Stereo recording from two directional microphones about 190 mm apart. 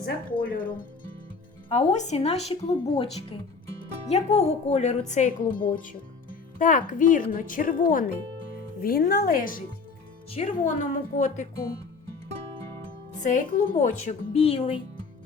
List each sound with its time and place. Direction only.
0.4 s speech: 50° left (ahead or behind)
1.9 s a woman's voice: 35° left (ahead or behind)
13.2 s a woman's voice: 40° left (ahead or behind)